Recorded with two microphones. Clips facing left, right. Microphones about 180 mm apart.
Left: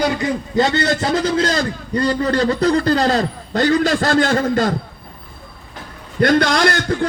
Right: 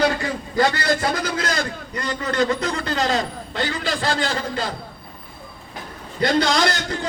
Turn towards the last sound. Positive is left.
turn(degrees=55)  # may be behind; listen again after turning